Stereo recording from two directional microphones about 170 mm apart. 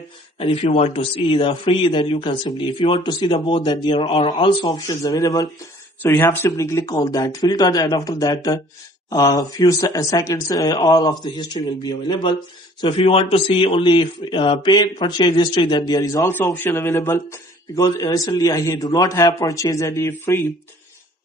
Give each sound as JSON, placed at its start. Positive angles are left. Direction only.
{"t": 0.3, "sound": "speech", "side_deg": 35}